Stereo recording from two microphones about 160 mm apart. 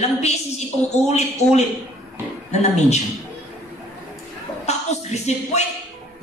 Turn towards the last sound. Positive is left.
turn(degrees=45)  # may be behind; listen again after turning